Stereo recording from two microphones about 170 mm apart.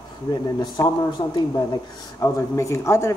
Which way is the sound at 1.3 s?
20° left (ahead or behind).